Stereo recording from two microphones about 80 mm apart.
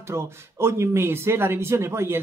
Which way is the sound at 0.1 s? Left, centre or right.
Right.